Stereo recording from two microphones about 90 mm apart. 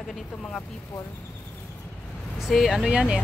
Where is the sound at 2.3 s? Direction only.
Centre (ahead or behind).